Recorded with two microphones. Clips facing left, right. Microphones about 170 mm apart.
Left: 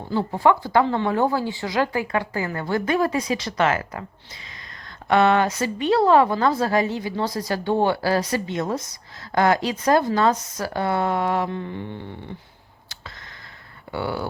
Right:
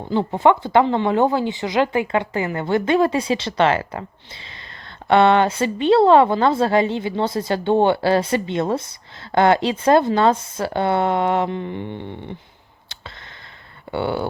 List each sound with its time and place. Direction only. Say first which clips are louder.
0.1 s speech: right 3 dB; 20° right (ahead or behind)
5.0 s speech: right 3 dB; 25° right (ahead or behind)
13.9 s speech: right 4 dB; 25° right (ahead or behind)